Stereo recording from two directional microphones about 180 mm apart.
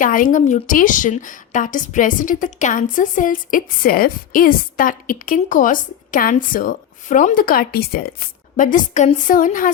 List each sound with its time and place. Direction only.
0.0 s a woman's voice: 50° left (ahead or behind)